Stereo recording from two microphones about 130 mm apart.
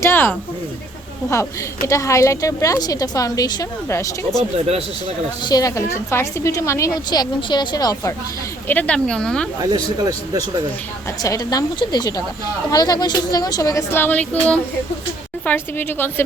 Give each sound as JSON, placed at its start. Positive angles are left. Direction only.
{"t": 0.0, "sound": "speech", "side_deg": 15}
{"t": 1.9, "sound": "a woman's voice", "side_deg": 25}
{"t": 4.5, "sound": "speech", "side_deg": -50}
{"t": 5.0, "sound": "a woman's voice", "side_deg": 35}
{"t": 8.6, "sound": "speech", "side_deg": 15}
{"t": 9.6, "sound": "a man's voice", "side_deg": -30}
{"t": 11.2, "sound": "a woman's voice", "side_deg": 30}